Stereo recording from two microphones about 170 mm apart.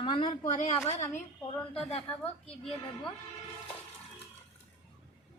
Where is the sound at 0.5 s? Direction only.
40° left (ahead or behind).